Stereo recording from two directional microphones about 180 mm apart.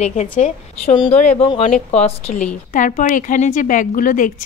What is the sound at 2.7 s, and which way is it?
A woman's voice, 45° left (ahead or behind).